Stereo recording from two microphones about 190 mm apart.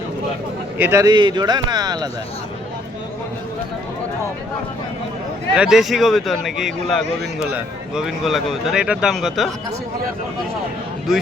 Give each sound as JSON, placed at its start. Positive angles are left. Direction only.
{"t": 0.8, "sound": "speech", "side_deg": -15}
{"t": 5.5, "sound": "speech", "side_deg": 0}